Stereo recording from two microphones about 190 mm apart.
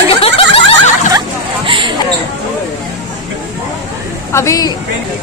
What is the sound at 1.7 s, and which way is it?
Basketball bounce, 25° right (ahead or behind).